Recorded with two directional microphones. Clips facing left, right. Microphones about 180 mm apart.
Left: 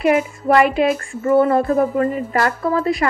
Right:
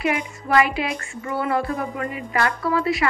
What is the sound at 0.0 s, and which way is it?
Music, 45° left (ahead or behind).